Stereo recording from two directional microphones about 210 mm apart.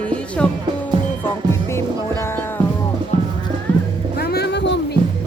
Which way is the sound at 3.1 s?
25° right (ahead or behind).